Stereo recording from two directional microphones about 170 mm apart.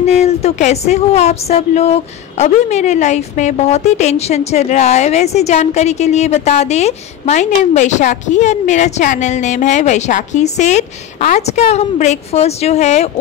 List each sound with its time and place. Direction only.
0.0 s speech: 40° left (ahead or behind)